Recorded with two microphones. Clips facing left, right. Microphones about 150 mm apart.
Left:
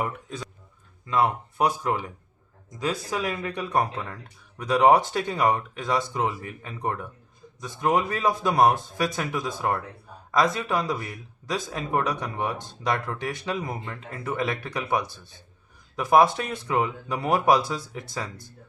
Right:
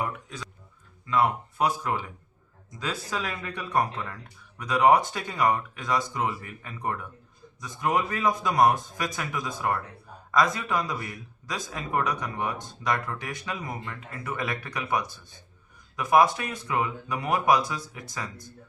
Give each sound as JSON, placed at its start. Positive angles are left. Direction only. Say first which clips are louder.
{"t": 1.0, "sound": "speech", "louder": "left 1 dB", "side_deg": 25}
{"t": 4.1, "sound": "speech", "louder": "left 2 dB", "side_deg": 30}